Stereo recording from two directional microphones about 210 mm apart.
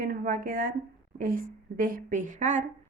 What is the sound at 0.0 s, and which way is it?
Speech, 45° right (ahead or behind).